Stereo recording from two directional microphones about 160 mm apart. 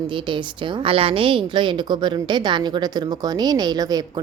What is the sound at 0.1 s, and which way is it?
A woman's voice, 30° right (ahead or behind).